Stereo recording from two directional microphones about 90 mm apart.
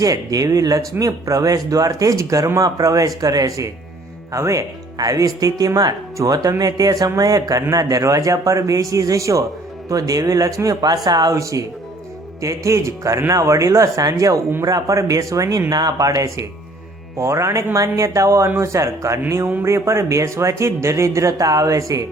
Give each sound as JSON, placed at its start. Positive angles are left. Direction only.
{"t": 0.0, "sound": "speech", "side_deg": -40}